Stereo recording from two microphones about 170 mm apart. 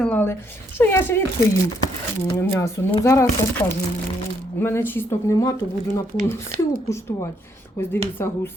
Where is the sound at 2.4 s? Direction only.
15° left (ahead or behind).